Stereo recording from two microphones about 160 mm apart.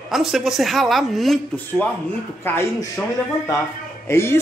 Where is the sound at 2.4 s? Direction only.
15° left (ahead or behind).